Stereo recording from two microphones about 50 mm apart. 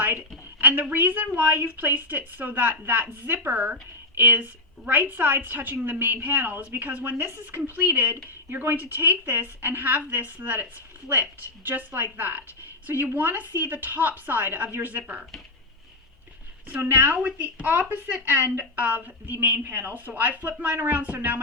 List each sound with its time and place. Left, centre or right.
0.6 s a woman's voice: right
7.2 s speech: right
7.5 s a woman's voice: right
16.8 s a woman's voice: right